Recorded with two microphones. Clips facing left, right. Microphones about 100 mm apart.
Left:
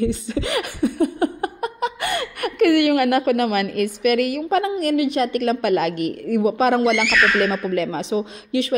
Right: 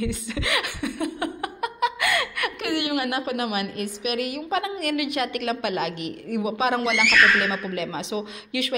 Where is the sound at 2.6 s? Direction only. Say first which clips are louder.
Left 12 dB; 55° left (ahead or behind).